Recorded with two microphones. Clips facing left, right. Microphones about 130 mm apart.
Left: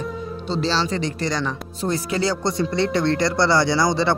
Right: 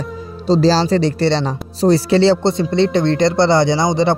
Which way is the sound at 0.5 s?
35° right (ahead or behind).